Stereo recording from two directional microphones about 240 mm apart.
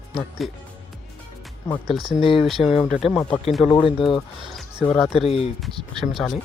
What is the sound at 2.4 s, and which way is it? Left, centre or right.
Speech, centre.